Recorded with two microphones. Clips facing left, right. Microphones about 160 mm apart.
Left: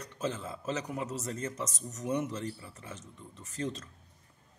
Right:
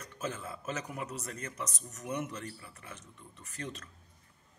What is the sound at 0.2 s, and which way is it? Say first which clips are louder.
Speech: left 3 dB; 20° left (ahead or behind).